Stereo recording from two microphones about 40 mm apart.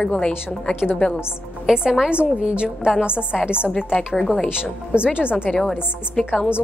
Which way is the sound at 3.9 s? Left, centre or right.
Centre.